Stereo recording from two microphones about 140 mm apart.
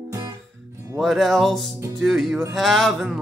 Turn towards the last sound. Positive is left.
turn(degrees=0)  # may be behind; listen again after turning